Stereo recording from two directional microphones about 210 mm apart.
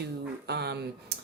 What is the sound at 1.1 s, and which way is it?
Computer keyboard, 50° right (ahead or behind).